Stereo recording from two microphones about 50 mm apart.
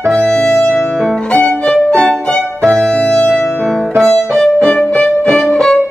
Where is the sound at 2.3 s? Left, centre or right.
Centre.